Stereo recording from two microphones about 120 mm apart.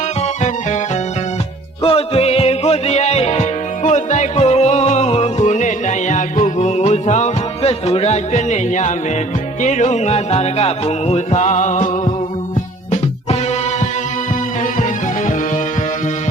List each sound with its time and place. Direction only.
1.8 s music: 50° left (ahead or behind)
3.8 s music: 80° left